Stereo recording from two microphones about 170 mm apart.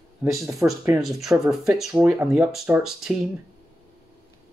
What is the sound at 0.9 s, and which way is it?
Speech, centre (ahead or behind).